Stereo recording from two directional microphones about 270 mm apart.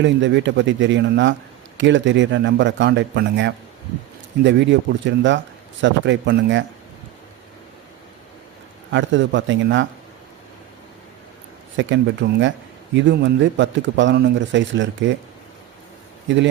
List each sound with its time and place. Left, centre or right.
0.0 s a man's voice: right
8.9 s speech: right
11.8 s a man's voice: right